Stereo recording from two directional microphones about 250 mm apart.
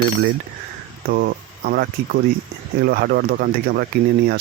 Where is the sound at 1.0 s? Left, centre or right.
Right.